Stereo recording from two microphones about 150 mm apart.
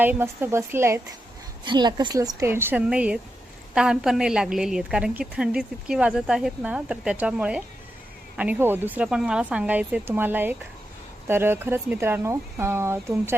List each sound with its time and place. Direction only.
0.0 s a woman's voice: 15° right (ahead or behind)
1.6 s a woman's voice: 30° right (ahead or behind)